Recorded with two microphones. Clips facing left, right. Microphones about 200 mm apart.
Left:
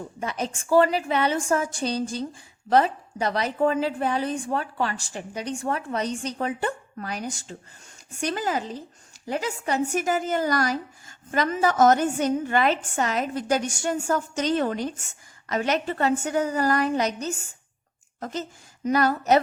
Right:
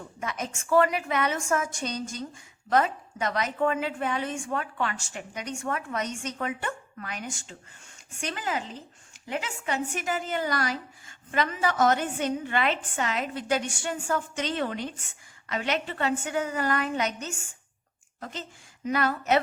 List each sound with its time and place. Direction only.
0.2 s a woman's voice: 30° left (ahead or behind)